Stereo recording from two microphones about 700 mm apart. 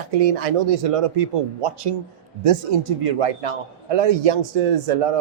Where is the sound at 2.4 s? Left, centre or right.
Right.